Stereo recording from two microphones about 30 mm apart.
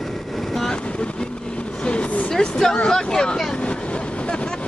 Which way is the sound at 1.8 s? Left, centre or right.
Left.